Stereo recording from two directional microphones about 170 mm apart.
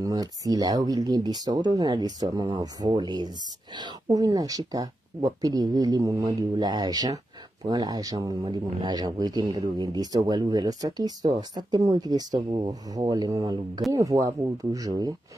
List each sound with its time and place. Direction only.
0.0 s speech: 20° right (ahead or behind)